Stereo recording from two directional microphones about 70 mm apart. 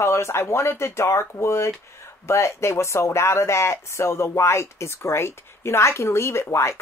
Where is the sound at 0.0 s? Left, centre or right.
Left.